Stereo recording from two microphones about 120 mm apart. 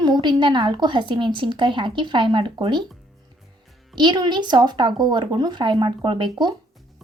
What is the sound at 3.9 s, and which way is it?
Speech, 40° right (ahead or behind).